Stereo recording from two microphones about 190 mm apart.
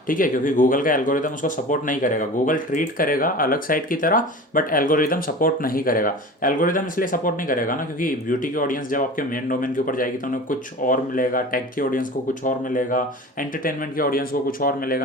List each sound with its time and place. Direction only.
0.1 s speech: 45° left (ahead or behind)